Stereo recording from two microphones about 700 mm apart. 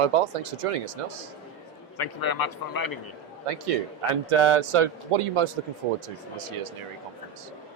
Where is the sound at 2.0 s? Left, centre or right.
Left.